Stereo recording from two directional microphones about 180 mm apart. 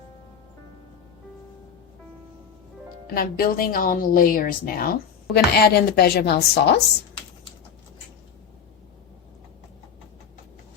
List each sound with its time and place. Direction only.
3.2 s a woman's voice: 55° left (ahead or behind)